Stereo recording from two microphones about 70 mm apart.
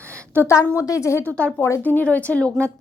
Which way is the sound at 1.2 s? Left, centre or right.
Left.